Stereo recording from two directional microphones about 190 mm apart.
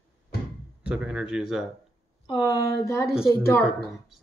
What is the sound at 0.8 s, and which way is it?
Speech, 5° right (ahead or behind).